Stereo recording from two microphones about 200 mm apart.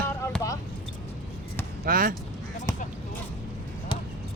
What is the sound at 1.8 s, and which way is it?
Speech, 45° right (ahead or behind).